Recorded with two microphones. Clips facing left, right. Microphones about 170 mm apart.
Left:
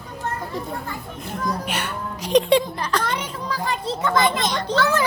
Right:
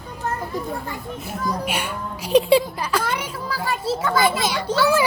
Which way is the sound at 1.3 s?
10° right (ahead or behind).